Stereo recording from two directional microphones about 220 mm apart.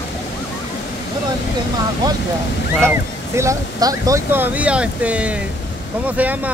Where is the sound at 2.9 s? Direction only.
15° right (ahead or behind).